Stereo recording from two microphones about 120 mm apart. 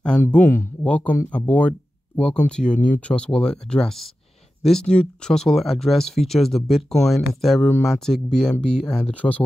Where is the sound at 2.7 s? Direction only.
90° left.